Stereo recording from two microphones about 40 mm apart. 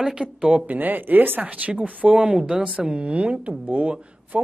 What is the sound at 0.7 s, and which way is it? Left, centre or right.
Speech, right.